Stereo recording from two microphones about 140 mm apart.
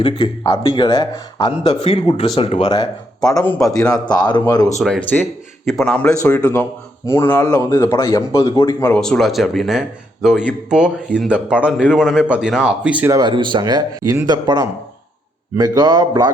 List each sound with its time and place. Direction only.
0.0 s speech: 30° left (ahead or behind)
0.9 s speech: 25° left (ahead or behind)
1.8 s speech: 45° left (ahead or behind)
3.2 s a man's voice: 5° left (ahead or behind)
3.9 s speech: 30° left (ahead or behind)
4.8 s a man's voice: 5° left (ahead or behind)
8.9 s speech: 5° left (ahead or behind)
13.1 s speech: 35° right (ahead or behind)